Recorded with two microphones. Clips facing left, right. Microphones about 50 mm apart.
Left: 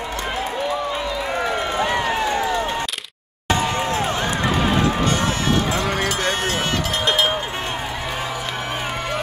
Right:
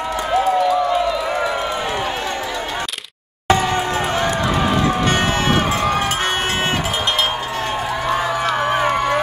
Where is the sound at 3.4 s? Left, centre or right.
Right.